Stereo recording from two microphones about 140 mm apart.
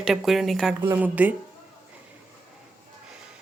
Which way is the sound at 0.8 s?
10° right (ahead or behind).